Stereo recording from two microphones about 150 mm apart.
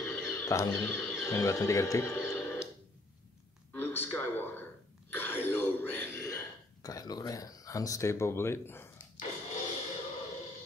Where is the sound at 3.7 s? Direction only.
15° left (ahead or behind).